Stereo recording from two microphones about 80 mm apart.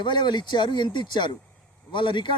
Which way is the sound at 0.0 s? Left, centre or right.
Left.